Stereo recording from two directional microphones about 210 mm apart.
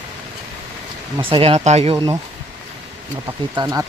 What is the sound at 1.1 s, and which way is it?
Speech, 25° right (ahead or behind).